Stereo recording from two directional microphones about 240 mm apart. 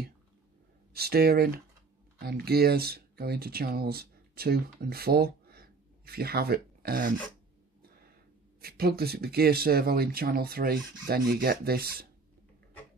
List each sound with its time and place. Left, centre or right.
0.9 s speech: right
8.5 s speech: right